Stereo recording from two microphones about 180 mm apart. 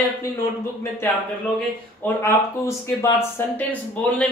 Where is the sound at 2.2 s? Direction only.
15° left (ahead or behind).